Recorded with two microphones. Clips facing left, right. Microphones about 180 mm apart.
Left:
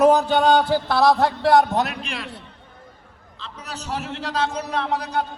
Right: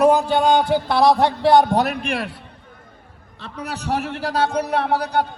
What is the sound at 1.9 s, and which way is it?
Speech, 55° right (ahead or behind).